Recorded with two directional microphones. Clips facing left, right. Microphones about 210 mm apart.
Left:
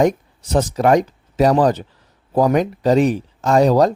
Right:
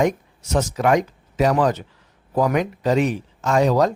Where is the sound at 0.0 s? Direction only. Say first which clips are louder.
Left 4 dB; 35° left (ahead or behind).